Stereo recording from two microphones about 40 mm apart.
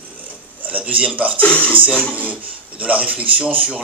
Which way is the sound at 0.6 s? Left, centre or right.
Right.